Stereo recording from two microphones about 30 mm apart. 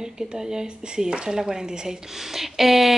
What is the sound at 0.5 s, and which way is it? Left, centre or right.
Speech, right.